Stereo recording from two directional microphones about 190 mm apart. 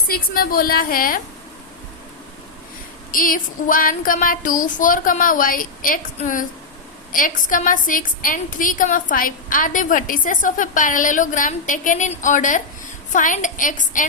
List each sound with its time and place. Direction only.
0.1 s a woman's voice: 50° left (ahead or behind)
3.1 s a woman's voice: 45° left (ahead or behind)